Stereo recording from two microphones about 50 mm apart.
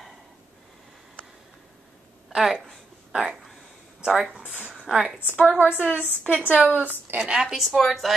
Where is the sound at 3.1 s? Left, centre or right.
Centre.